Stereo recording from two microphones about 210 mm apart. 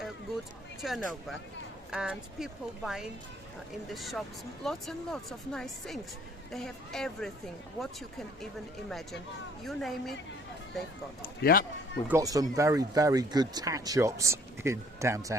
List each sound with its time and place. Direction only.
0.8 s speech: centre (ahead or behind)
9.6 s speech: centre (ahead or behind)
11.5 s speech: 45° left (ahead or behind)
12.0 s speech: 15° right (ahead or behind)